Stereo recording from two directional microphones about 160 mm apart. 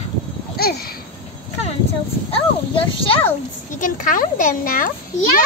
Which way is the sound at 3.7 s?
55° left (ahead or behind).